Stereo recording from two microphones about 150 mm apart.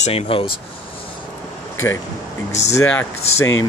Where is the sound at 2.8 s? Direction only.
10° left (ahead or behind).